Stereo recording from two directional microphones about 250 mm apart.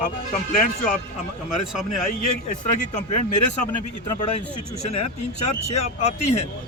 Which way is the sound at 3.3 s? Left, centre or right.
Left.